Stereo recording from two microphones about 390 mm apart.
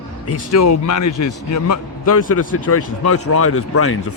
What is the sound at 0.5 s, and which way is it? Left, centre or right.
A man's voice, left.